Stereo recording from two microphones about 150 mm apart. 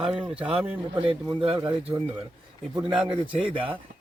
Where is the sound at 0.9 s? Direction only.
40° right (ahead or behind).